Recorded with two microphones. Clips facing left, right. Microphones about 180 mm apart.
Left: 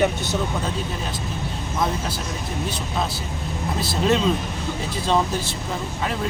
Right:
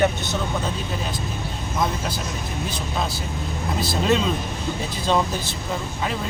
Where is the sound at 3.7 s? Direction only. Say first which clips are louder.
Even; centre (ahead or behind).